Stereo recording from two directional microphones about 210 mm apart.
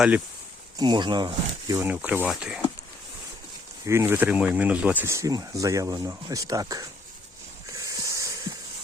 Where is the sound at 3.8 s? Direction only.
15° right (ahead or behind).